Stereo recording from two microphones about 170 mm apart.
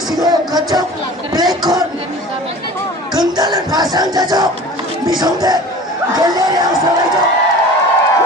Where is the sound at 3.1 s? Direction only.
25° right (ahead or behind).